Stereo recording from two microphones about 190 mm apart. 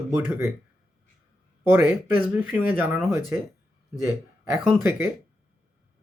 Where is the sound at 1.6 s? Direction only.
10° right (ahead or behind).